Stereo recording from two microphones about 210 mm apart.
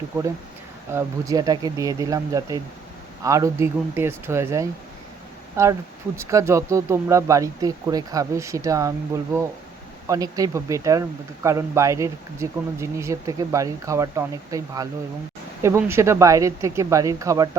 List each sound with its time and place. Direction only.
0.9 s speech: 15° right (ahead or behind)
10.1 s speech: 15° right (ahead or behind)